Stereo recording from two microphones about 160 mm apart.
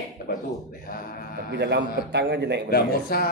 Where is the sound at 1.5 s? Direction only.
90° right.